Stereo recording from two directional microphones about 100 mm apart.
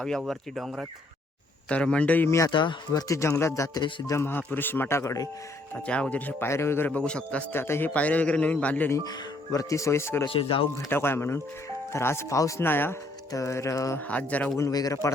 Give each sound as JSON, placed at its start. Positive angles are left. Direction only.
{"t": 0.3, "sound": "speech", "side_deg": 0}
{"t": 1.7, "sound": "a man's voice", "side_deg": 10}
{"t": 2.5, "sound": "speech", "side_deg": 50}
{"t": 2.9, "sound": "speech", "side_deg": 35}
{"t": 3.8, "sound": "speech", "side_deg": 55}
{"t": 4.1, "sound": "speech", "side_deg": 25}
{"t": 5.7, "sound": "a man's voice", "side_deg": 10}
{"t": 7.5, "sound": "a man's voice", "side_deg": 25}
{"t": 9.0, "sound": "speech", "side_deg": 35}
{"t": 10.2, "sound": "speech", "side_deg": 65}
{"t": 10.8, "sound": "speech", "side_deg": 25}
{"t": 12.6, "sound": "speech", "side_deg": 20}
{"t": 14.1, "sound": "a man's voice", "side_deg": 15}
{"t": 14.6, "sound": "speech", "side_deg": 40}